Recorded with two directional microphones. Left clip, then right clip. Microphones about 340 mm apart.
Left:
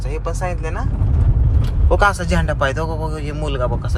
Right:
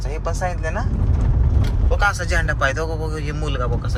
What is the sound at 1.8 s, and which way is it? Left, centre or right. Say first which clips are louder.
Speech: left 5 dB; centre.